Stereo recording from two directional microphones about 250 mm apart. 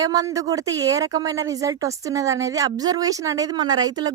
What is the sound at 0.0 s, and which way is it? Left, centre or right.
Speech, centre.